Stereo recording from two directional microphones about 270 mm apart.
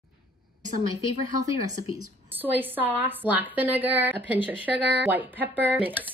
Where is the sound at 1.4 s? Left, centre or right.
Right.